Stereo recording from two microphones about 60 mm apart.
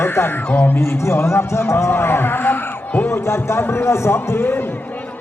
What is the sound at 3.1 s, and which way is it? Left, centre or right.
A man's voice, left.